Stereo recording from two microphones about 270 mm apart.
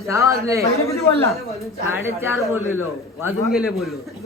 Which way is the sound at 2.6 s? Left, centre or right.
Left.